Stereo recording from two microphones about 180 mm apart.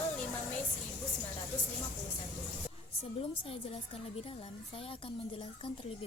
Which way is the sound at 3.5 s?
30° left (ahead or behind).